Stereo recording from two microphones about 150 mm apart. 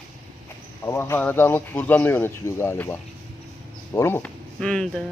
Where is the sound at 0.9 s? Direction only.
15° left (ahead or behind).